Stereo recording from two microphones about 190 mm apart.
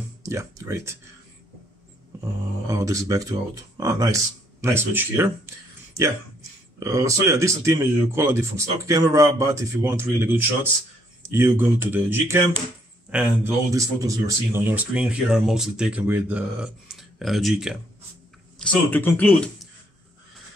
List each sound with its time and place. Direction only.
0.2 s speech: 15° right (ahead or behind)
2.7 s speech: 15° right (ahead or behind)
6.8 s speech: 15° right (ahead or behind); by 19.7 s 5° left (ahead or behind)